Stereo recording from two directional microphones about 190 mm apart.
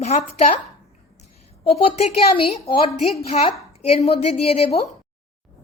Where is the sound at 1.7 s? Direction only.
35° left (ahead or behind).